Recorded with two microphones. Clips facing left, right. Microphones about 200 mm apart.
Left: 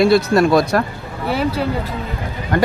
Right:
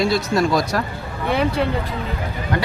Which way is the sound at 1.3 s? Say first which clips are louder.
Even; 5° left (ahead or behind).